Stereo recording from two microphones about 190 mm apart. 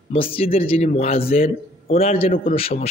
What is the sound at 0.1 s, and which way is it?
A man's voice, 30° left (ahead or behind).